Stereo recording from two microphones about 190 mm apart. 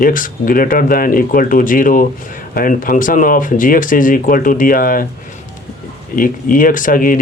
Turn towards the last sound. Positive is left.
turn(degrees=45)  # may be behind; listen again after turning